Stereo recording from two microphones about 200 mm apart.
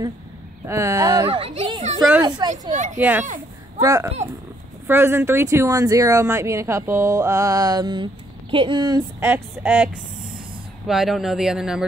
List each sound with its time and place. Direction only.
0.7 s speech: 15° right (ahead or behind)
1.4 s a child's voice: 30° right (ahead or behind)
2.2 s speech: 20° right (ahead or behind)
2.7 s a child's voice: 40° right (ahead or behind)
3.0 s speech: 10° right (ahead or behind)
9.2 s speech: 10° right (ahead or behind)
10.9 s speech: centre (ahead or behind)